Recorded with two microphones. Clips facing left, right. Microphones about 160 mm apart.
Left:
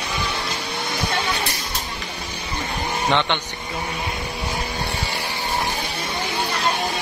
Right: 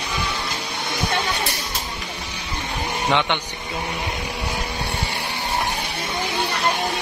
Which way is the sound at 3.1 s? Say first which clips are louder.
Even; 15° right (ahead or behind).